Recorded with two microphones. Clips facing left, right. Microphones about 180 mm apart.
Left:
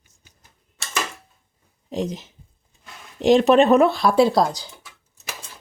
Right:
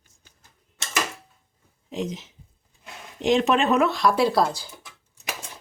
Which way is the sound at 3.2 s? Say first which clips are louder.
Left 6 dB; 40° left (ahead or behind).